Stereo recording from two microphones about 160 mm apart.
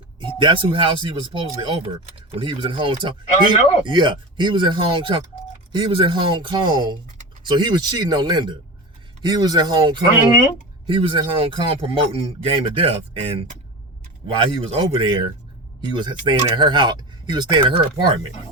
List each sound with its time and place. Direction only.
0.2 s a man's voice: 30° right (ahead or behind)